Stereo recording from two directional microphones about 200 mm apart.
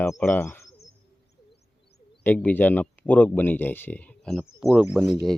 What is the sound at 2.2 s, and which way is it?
Speech, 10° left (ahead or behind).